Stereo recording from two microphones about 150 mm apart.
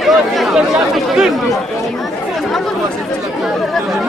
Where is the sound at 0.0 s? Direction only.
Centre (ahead or behind).